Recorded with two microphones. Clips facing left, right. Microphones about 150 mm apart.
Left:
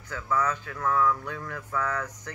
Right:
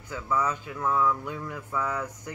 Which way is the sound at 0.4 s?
10° right (ahead or behind).